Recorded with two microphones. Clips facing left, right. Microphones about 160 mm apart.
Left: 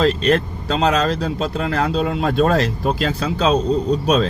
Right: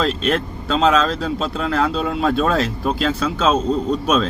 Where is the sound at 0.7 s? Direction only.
45° left (ahead or behind).